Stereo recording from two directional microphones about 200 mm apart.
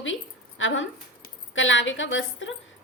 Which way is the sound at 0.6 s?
70° left (ahead or behind).